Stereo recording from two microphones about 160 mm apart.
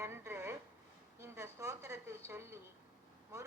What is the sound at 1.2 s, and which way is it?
Speech, 15° right (ahead or behind).